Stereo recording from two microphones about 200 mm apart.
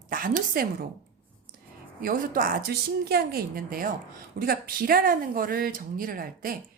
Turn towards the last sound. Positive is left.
turn(degrees=-45)  # may be behind; listen again after turning